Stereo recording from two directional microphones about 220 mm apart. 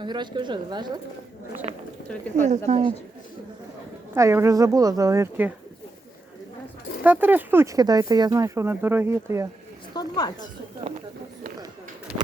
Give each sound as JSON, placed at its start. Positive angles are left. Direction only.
{"t": 0.0, "sound": "a woman's voice", "side_deg": -20}
{"t": 4.1, "sound": "speech", "side_deg": -10}
{"t": 7.0, "sound": "speech", "side_deg": -10}
{"t": 9.9, "sound": "speech", "side_deg": 20}
{"t": 12.1, "sound": "a sound", "side_deg": -5}